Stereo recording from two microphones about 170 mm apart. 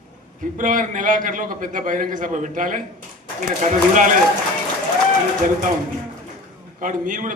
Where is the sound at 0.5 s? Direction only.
50° right (ahead or behind).